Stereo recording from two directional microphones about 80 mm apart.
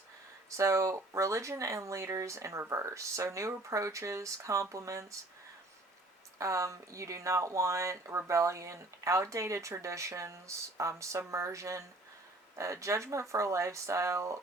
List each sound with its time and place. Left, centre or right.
0.5 s speech: right
6.4 s speech: right